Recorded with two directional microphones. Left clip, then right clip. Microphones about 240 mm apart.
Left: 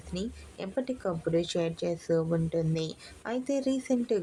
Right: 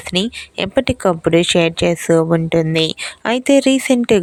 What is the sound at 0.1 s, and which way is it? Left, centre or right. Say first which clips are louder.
Speech: right 18 dB; right.